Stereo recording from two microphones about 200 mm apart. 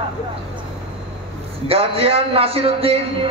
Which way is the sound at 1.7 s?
30° right (ahead or behind).